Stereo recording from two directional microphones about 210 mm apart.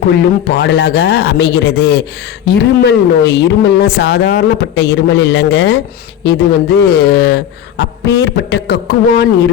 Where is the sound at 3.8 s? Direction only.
50° left (ahead or behind).